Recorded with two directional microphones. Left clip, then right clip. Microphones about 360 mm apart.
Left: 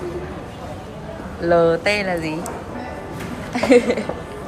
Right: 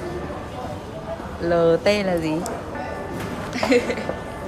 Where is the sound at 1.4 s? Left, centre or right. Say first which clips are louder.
Left 2 dB; centre.